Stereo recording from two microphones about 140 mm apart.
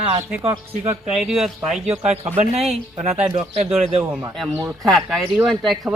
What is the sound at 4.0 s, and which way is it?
Speech, 15° right (ahead or behind).